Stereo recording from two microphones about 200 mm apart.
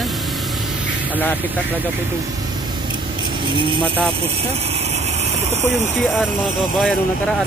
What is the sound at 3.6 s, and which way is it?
Speech, 25° right (ahead or behind).